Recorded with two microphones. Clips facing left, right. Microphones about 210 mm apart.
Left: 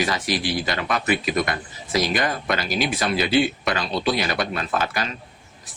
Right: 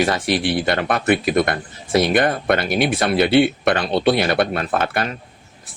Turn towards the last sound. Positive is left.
turn(degrees=-55)  # may be behind; listen again after turning